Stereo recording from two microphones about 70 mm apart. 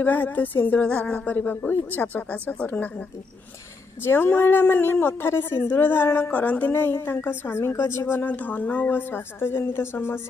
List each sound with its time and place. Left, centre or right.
0.0 s a woman's voice: left
6.3 s a woman's voice: left
6.7 s speech: left
8.1 s a woman's voice: left